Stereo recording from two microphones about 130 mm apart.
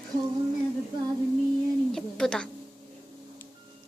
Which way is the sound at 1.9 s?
5° left (ahead or behind).